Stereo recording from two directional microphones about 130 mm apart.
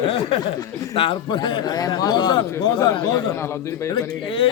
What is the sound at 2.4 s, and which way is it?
A man's voice, 20° left (ahead or behind).